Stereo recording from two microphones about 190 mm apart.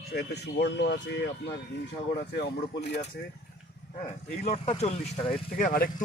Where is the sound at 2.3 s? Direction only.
60° left (ahead or behind).